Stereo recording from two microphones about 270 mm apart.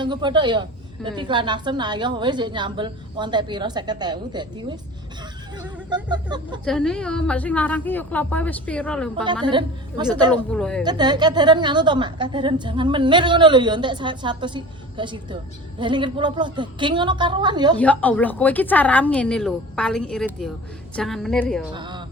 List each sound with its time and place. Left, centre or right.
0.0 s a woman's voice: centre
6.7 s a woman's voice: centre
9.2 s a woman's voice: centre
10.5 s a woman's voice: centre
10.8 s a woman's voice: centre
17.7 s a woman's voice: centre
21.8 s speech: centre